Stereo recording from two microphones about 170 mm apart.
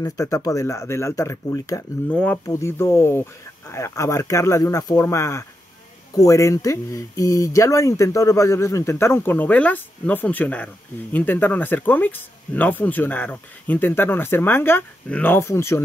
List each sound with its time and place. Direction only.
0.0 s speech: 20° left (ahead or behind)